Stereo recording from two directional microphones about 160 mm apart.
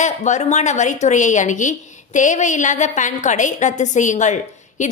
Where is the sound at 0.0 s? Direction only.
45° left (ahead or behind).